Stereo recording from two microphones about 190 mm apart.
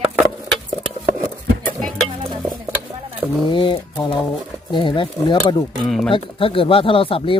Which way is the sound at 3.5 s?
25° left (ahead or behind).